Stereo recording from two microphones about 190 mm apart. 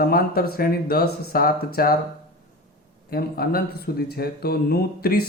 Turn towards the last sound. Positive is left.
turn(degrees=55)  # may be behind; listen again after turning